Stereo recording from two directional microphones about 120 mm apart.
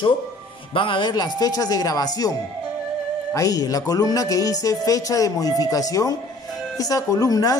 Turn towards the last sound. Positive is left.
turn(degrees=30)  # may be behind; listen again after turning